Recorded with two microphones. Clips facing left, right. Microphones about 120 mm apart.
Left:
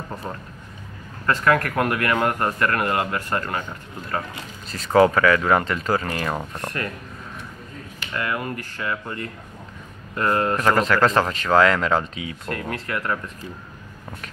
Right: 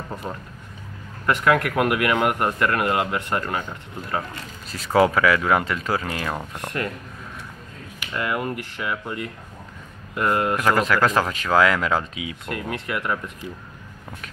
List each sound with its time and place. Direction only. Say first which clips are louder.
1.2 s a man's voice: even; 15° right (ahead or behind)
6.5 s speech: right 1 dB; 20° right (ahead or behind)
8.0 s a man's voice: right 1 dB; 15° right (ahead or behind)